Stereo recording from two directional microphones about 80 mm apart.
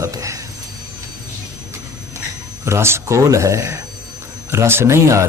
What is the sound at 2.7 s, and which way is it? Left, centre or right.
Speech, right.